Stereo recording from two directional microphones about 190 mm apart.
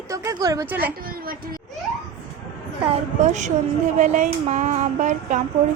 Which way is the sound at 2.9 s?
40° right (ahead or behind).